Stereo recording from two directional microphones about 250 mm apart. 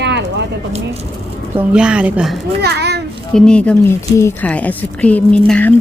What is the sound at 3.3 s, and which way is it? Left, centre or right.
Speech, centre.